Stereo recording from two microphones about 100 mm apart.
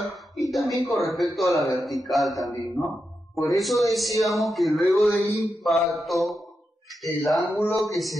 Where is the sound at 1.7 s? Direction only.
Centre (ahead or behind).